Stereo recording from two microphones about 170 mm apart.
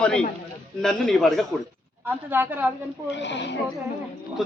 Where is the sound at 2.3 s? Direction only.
10° right (ahead or behind).